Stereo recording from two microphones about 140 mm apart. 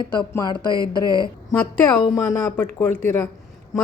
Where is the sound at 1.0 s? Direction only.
25° right (ahead or behind).